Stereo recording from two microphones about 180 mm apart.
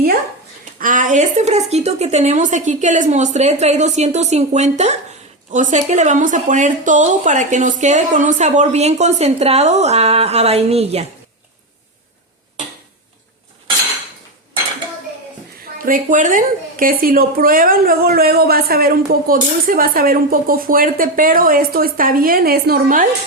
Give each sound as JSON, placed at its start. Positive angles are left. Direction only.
{"t": 0.8, "sound": "speech", "side_deg": -45}
{"t": 15.8, "sound": "speech", "side_deg": -50}